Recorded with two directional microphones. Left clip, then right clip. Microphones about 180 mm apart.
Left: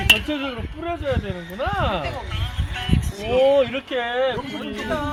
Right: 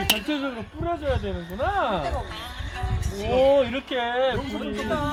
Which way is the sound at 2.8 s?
30° left (ahead or behind).